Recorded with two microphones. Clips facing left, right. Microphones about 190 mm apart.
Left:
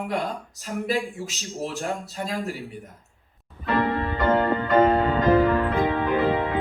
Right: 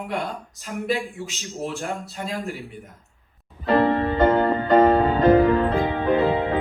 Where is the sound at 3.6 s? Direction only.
35° right (ahead or behind).